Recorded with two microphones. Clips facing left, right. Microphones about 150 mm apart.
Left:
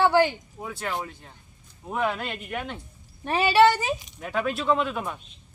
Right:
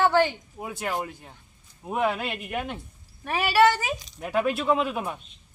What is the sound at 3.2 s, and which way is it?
Speech, 20° left (ahead or behind).